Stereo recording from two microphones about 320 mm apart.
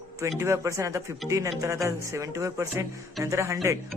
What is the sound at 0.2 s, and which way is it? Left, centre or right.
Speech, centre.